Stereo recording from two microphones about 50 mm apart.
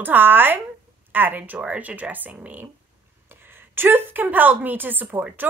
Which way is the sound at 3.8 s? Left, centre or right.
Right.